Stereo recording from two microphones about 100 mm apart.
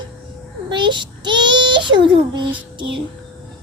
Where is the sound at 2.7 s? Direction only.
55° right (ahead or behind).